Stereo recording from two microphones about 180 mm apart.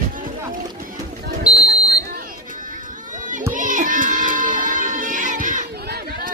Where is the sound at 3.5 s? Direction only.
45° right (ahead or behind).